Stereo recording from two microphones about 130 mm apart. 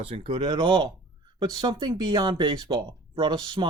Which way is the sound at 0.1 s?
40° right (ahead or behind).